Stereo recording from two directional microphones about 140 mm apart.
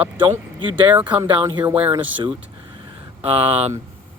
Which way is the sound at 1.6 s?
10° right (ahead or behind).